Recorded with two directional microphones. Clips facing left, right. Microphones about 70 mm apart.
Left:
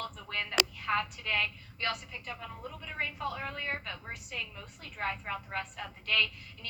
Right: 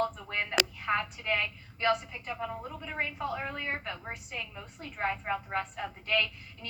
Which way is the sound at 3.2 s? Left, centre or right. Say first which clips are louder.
Right 2 dB; right.